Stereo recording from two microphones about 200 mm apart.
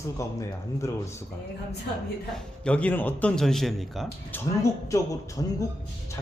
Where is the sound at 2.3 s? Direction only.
5° left (ahead or behind).